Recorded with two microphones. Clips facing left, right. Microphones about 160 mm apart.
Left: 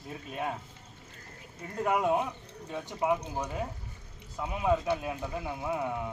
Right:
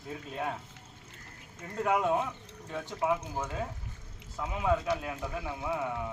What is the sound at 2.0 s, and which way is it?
Speech, 15° left (ahead or behind).